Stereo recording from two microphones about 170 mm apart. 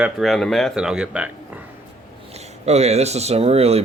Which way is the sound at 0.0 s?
Centre (ahead or behind).